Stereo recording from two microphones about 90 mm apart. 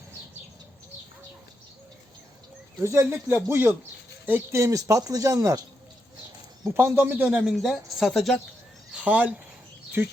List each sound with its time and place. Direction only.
2.8 s a man's voice: 30° right (ahead or behind)
6.7 s a man's voice: 25° right (ahead or behind)
7.4 s a woman's voice: centre (ahead or behind)
8.9 s speech: 15° right (ahead or behind)